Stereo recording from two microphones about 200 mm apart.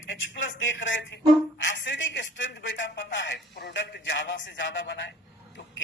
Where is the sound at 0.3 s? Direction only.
65° left (ahead or behind).